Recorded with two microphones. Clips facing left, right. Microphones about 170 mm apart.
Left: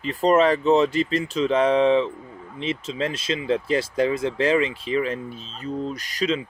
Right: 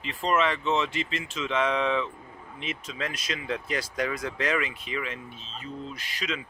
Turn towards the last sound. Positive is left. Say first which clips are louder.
# left 10 dB
turn(degrees=35)  # may be behind; listen again after turning